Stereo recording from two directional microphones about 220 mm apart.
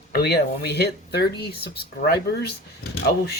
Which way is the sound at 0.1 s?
45° left (ahead or behind).